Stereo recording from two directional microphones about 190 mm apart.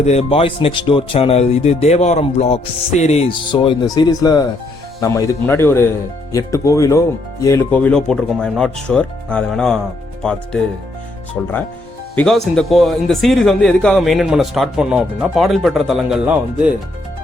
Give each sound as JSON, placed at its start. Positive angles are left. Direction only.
{"t": 0.0, "sound": "speech", "side_deg": 35}
{"t": 3.5, "sound": "speech", "side_deg": 25}
{"t": 11.4, "sound": "speech", "side_deg": 5}